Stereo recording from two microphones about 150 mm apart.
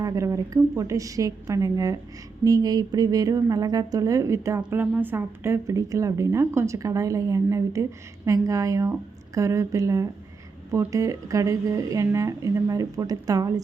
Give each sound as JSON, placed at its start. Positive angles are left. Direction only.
{"t": 0.0, "sound": "a woman's voice", "side_deg": -25}